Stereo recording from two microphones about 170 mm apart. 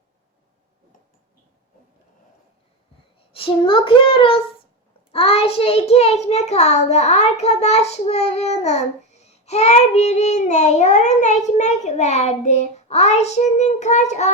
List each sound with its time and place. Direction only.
3.2 s a child's voice: 35° left (ahead or behind)